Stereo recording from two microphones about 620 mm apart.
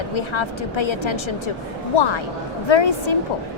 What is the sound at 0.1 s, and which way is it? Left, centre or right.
A woman's voice, left.